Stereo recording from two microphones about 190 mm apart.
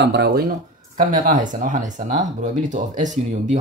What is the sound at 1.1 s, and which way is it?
Speech, 45° right (ahead or behind).